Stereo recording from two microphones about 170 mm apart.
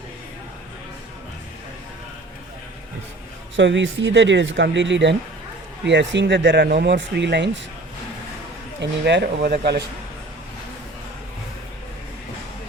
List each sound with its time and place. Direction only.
3.5 s speech: 90° right
8.8 s speech: 90° right; by 9.8 s 70° right (ahead or behind)